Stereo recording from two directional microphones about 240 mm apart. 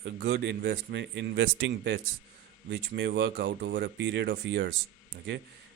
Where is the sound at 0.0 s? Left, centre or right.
Right.